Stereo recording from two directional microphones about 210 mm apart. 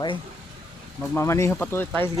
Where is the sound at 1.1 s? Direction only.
15° left (ahead or behind).